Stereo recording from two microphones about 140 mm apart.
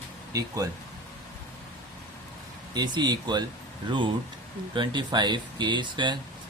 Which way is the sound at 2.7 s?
30° right (ahead or behind).